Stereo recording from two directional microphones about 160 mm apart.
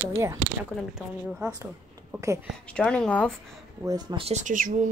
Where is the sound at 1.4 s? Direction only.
20° right (ahead or behind).